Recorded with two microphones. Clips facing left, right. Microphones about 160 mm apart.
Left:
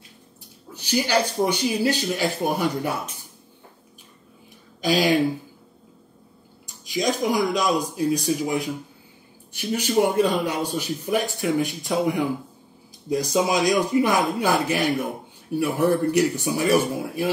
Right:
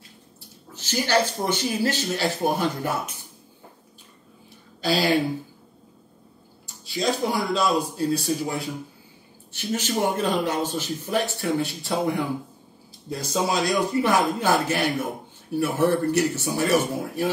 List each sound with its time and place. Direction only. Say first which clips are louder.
0.7 s a man's voice: left 1 dB; 15° left (ahead or behind)
4.8 s speech: left 2 dB; 15° left (ahead or behind)
6.6 s a man's voice: left 1 dB; 15° left (ahead or behind)
9.8 s a man's voice: left 5 dB; 10° left (ahead or behind)